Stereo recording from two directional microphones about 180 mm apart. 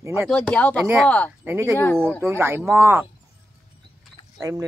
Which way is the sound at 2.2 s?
15° right (ahead or behind).